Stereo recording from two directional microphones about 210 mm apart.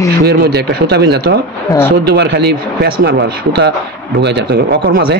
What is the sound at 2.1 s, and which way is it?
Speech, 50° right (ahead or behind).